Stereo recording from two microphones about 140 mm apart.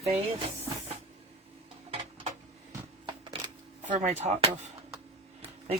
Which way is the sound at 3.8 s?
60° right (ahead or behind).